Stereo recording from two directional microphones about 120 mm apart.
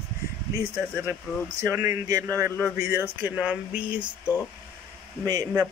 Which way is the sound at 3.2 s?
10° right (ahead or behind).